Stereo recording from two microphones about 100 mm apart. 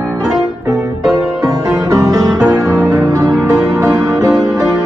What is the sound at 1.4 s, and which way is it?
Music, 35° right (ahead or behind).